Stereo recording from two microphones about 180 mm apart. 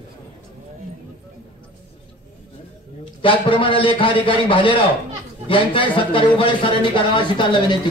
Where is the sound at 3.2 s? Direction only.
30° left (ahead or behind).